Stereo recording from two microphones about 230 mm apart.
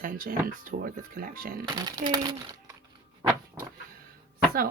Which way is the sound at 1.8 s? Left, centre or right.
Centre.